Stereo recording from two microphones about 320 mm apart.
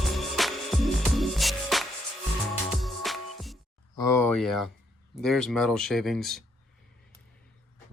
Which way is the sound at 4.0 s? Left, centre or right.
Centre.